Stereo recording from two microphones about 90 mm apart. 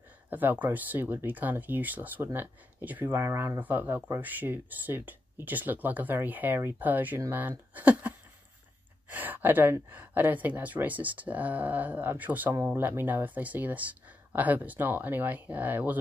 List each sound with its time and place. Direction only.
0.3 s speech: 20° right (ahead or behind)
9.1 s speech: 20° right (ahead or behind)